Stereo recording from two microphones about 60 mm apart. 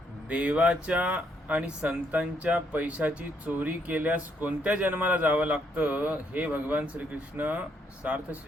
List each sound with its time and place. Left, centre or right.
0.3 s speech: centre